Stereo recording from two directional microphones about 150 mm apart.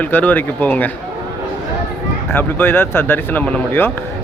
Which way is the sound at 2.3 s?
15° left (ahead or behind).